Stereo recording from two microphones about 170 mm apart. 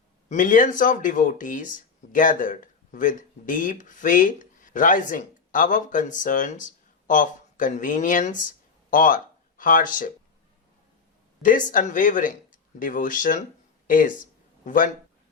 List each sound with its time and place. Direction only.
0.3 s speech: 50° left (ahead or behind)
11.4 s speech: 50° left (ahead or behind)
13.8 s a sound: 50° left (ahead or behind)